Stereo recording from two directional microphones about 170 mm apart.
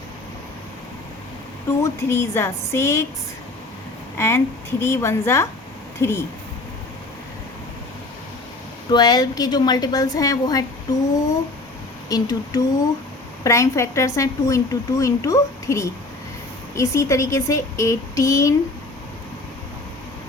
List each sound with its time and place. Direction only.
1.8 s a woman's voice: 15° left (ahead or behind)
4.2 s a woman's voice: 15° left (ahead or behind)
8.9 s a woman's voice: 25° left (ahead or behind)
12.0 s a woman's voice: 20° left (ahead or behind)